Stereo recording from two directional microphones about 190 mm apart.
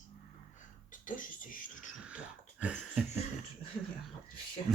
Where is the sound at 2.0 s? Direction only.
5° right (ahead or behind).